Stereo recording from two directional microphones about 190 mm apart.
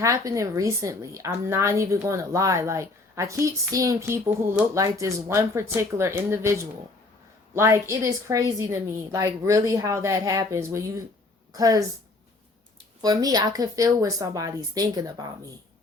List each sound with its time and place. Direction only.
0.0 s a woman's voice: 15° right (ahead or behind)
13.0 s a woman's voice: 20° right (ahead or behind)